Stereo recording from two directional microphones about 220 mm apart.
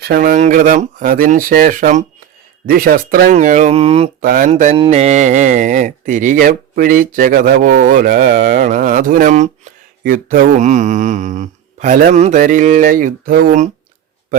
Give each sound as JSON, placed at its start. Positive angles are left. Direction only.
{"t": 0.0, "sound": "mantra", "side_deg": -45}
{"t": 4.2, "sound": "mantra", "side_deg": -40}